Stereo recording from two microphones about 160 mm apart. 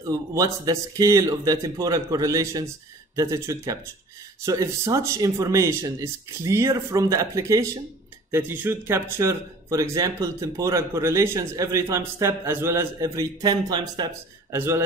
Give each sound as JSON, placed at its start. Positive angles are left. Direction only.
{"t": 0.0, "sound": "speech", "side_deg": -20}
{"t": 14.5, "sound": "a man's voice", "side_deg": -15}